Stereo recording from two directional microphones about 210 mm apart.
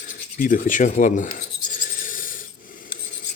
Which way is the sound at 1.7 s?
40° left (ahead or behind).